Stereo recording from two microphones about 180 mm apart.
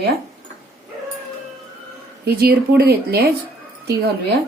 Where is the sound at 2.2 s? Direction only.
60° right (ahead or behind).